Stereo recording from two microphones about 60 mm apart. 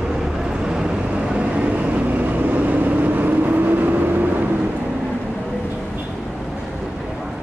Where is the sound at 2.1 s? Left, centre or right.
Right.